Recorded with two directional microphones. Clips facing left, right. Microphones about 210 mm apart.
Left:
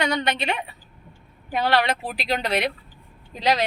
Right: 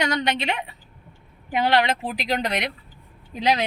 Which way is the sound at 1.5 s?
20° right (ahead or behind).